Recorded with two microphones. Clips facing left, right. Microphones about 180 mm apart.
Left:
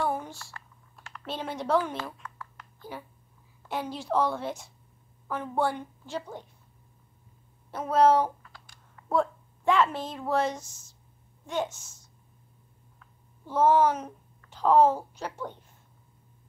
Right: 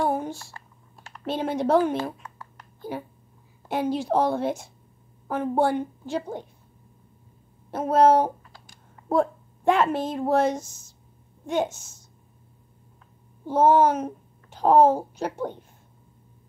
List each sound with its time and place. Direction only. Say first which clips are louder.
0.0 s a sound: right 5 dB; 45° right (ahead or behind)
0.4 s typing: right 2 dB; 30° right (ahead or behind)
1.2 s a woman's voice: right 8 dB; 50° right (ahead or behind)
3.6 s a woman's voice: right 8 dB; 55° right (ahead or behind)
7.7 s a woman's voice: right 3 dB; 45° right (ahead or behind)
8.4 s a sound: right 2 dB; 35° right (ahead or behind)
9.1 s a woman's voice: right 4 dB; 50° right (ahead or behind)
13.5 s a child's voice: right 4 dB; 50° right (ahead or behind)